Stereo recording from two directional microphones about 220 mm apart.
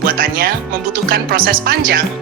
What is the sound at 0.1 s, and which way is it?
Speech, 40° right (ahead or behind).